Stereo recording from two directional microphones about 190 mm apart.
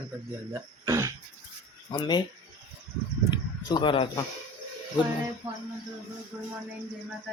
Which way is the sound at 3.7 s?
25° left (ahead or behind).